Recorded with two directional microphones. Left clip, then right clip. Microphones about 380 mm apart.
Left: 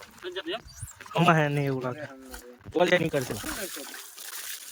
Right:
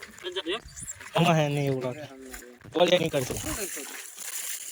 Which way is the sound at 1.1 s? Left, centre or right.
Centre.